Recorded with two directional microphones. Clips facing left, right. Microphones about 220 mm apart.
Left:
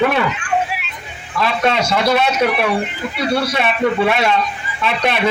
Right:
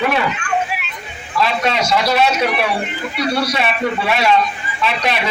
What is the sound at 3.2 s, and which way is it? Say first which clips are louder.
Speech: left 1 dB; 25° left (ahead or behind).